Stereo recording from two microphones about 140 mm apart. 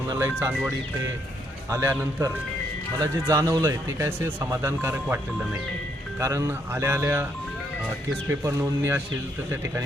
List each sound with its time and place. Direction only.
0.1 s speech: 20° right (ahead or behind)
1.7 s speech: 20° right (ahead or behind)
8.3 s speech: 20° right (ahead or behind)